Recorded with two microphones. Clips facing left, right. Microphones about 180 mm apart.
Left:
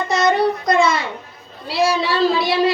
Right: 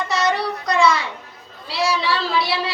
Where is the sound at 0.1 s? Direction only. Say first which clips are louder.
Left 6 dB; 50° left (ahead or behind).